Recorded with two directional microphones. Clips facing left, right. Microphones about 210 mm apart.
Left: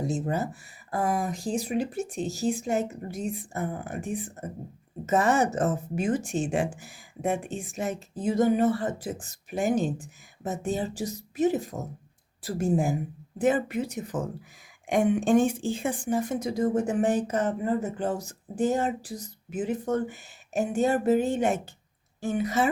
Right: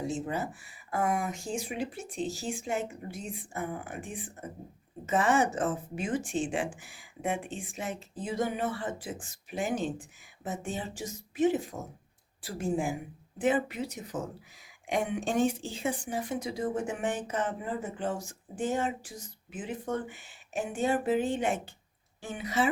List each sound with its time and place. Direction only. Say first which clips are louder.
0.1 s speech: left 4 dB; 40° left (ahead or behind)